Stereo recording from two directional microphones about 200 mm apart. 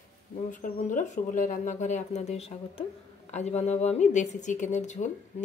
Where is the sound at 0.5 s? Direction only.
40° left (ahead or behind).